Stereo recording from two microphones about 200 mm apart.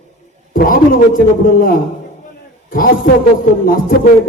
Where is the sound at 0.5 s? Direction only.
45° left (ahead or behind).